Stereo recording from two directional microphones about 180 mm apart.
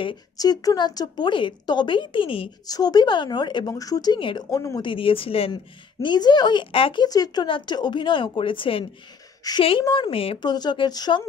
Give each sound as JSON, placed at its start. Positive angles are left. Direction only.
{"t": 0.0, "sound": "a woman's voice", "side_deg": 25}